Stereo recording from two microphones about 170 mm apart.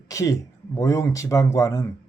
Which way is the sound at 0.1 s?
20° left (ahead or behind).